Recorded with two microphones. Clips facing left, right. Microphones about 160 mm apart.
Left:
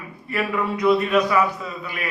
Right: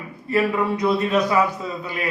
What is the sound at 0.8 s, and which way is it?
Speech, 30° right (ahead or behind).